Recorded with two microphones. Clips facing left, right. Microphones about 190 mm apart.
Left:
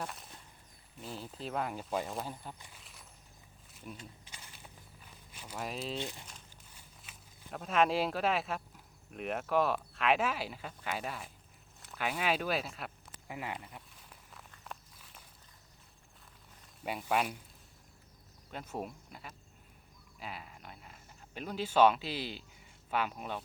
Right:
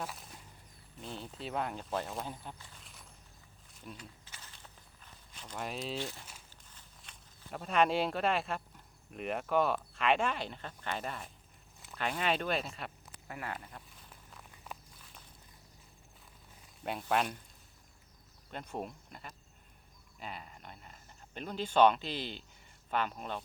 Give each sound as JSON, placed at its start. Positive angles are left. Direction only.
{"t": 0.0, "sound": "a sound", "side_deg": 0}
{"t": 1.0, "sound": "speech", "side_deg": 0}
{"t": 2.7, "sound": "a sound", "side_deg": 0}
{"t": 3.9, "sound": "walk", "side_deg": 15}
{"t": 6.0, "sound": "speech", "side_deg": 15}
{"t": 13.2, "sound": "speech", "side_deg": 15}
{"t": 13.7, "sound": "a sound", "side_deg": 5}
{"t": 14.5, "sound": "walk", "side_deg": -10}
{"t": 16.8, "sound": "speech", "side_deg": 5}
{"t": 18.5, "sound": "speech", "side_deg": 5}